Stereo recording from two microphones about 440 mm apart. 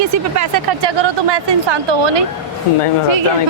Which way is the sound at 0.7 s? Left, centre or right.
Right.